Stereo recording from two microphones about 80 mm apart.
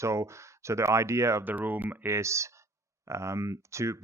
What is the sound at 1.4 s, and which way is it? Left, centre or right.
Speech, right.